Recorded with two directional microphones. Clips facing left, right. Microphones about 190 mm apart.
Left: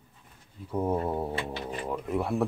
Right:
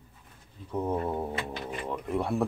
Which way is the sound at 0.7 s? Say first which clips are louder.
Left 2 dB; 10° left (ahead or behind).